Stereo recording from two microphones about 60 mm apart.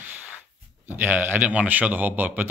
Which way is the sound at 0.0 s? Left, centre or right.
Right.